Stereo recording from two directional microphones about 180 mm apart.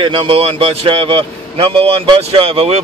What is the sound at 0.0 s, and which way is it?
A man's voice, 25° right (ahead or behind).